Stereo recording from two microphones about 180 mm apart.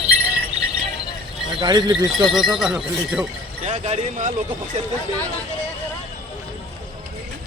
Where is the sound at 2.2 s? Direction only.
Centre (ahead or behind).